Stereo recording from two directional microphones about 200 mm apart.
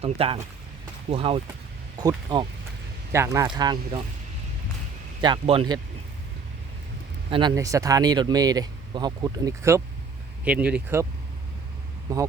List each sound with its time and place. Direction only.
0.0 s speech: 30° right (ahead or behind)
5.2 s speech: 25° right (ahead or behind)
7.3 s speech: 25° right (ahead or behind); by 11.0 s 10° right (ahead or behind)
12.1 s speech: 15° right (ahead or behind)